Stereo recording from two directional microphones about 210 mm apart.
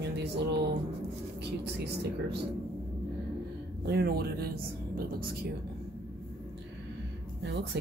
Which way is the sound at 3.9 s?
50° right (ahead or behind).